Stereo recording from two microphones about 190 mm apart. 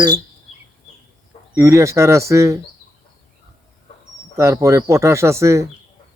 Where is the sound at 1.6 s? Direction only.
15° right (ahead or behind).